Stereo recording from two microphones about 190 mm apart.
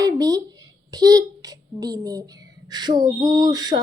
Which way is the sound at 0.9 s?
20° right (ahead or behind).